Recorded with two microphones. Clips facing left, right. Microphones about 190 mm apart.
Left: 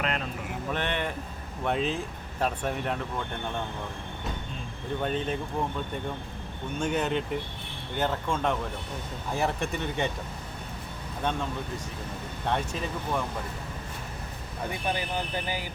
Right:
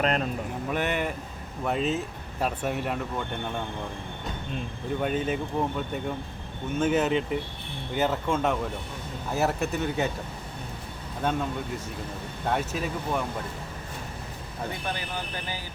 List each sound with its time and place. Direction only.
0.0 s speech: 40° right (ahead or behind)
0.7 s speech: 10° right (ahead or behind)
5.0 s speech: 5° right (ahead or behind)
6.7 s speech: 5° right (ahead or behind)
11.2 s speech: 5° right (ahead or behind)
12.5 s speech: 5° right (ahead or behind)